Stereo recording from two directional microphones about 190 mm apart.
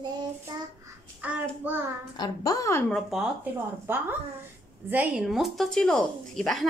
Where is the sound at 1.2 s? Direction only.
10° right (ahead or behind).